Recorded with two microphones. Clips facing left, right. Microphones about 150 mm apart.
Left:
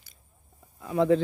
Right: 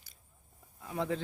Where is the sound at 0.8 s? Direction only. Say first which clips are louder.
Left 12 dB; 90° left.